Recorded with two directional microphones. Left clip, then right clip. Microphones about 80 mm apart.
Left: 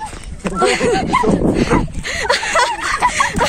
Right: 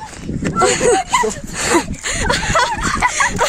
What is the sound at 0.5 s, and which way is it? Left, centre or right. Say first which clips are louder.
Speech: right 1 dB; right.